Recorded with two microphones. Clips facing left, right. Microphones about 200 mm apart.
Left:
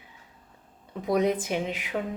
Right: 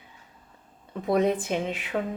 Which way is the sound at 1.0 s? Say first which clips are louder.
Right 1 dB; 15° left (ahead or behind).